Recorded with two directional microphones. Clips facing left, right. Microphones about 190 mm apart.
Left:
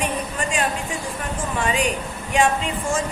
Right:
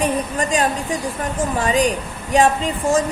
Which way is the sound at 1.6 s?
35° right (ahead or behind).